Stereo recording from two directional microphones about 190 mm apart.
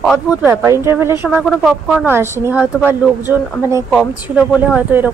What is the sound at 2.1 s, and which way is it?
A woman's voice, 10° right (ahead or behind).